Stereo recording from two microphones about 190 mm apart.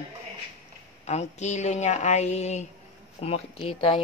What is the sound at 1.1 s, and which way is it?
A woman's voice, 35° left (ahead or behind).